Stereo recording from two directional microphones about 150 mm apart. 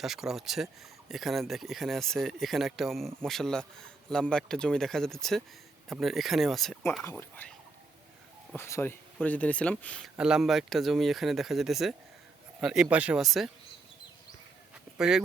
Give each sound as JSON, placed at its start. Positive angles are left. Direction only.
{"t": 0.0, "sound": "speech", "side_deg": -5}
{"t": 7.0, "sound": "speech", "side_deg": 15}
{"t": 8.5, "sound": "speech", "side_deg": 15}
{"t": 10.2, "sound": "speech", "side_deg": -5}
{"t": 14.9, "sound": "speech", "side_deg": -5}